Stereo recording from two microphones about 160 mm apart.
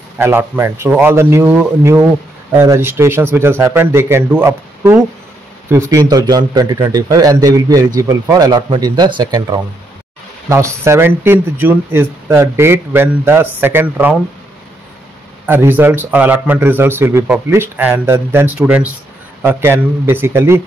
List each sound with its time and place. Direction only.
0.2 s a man's voice: 15° right (ahead or behind)
15.4 s speech: 10° right (ahead or behind)